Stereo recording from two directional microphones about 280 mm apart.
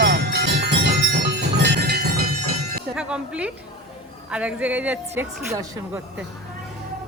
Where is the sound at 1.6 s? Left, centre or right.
Right.